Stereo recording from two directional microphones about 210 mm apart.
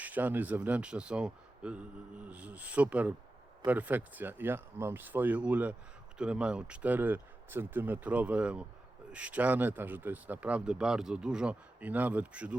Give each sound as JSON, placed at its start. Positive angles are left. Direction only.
{"t": 0.0, "sound": "speech", "side_deg": -10}